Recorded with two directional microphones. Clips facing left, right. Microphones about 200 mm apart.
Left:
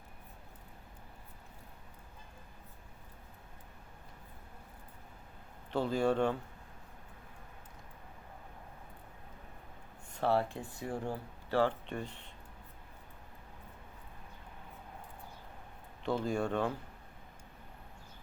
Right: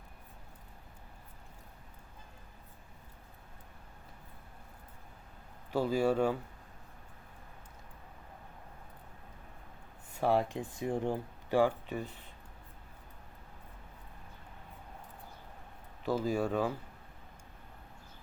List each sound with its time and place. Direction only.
5.7 s speech: 5° right (ahead or behind)
10.2 s speech: 15° right (ahead or behind)
16.0 s speech: 5° right (ahead or behind)